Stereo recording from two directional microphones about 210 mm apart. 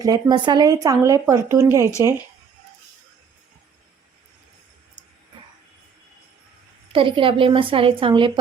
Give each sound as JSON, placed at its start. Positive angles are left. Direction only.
{"t": 0.0, "sound": "a woman's voice", "side_deg": -20}
{"t": 6.9, "sound": "a woman's voice", "side_deg": -25}